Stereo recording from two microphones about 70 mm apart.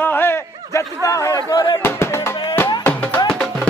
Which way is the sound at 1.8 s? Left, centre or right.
Left.